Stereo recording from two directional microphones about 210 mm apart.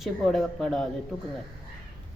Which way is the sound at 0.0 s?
Centre (ahead or behind).